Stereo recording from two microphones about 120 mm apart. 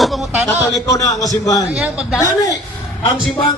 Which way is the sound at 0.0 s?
Centre (ahead or behind).